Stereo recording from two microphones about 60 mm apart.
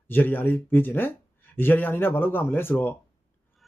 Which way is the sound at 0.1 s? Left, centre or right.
Left.